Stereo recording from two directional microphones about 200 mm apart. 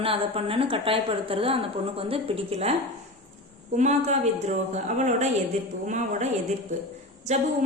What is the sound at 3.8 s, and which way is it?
A woman's voice, 35° right (ahead or behind).